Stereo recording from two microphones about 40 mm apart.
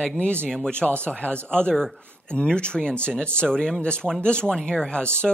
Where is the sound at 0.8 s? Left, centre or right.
Left.